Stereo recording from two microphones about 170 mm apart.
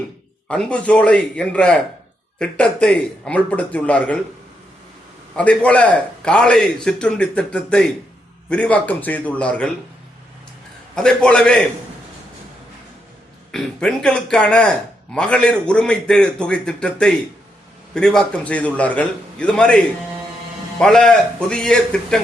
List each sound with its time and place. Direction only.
0.4 s a man's voice: 5° left (ahead or behind)
5.4 s a man's voice: 5° left (ahead or behind)
10.9 s speech: 5° left (ahead or behind)
13.5 s speech: 5° left (ahead or behind)